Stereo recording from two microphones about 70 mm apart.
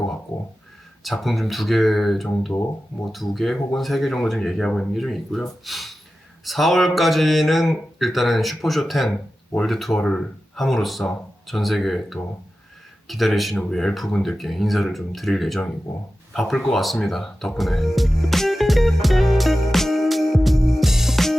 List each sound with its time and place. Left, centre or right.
1.0 s speech: centre
16.3 s music: centre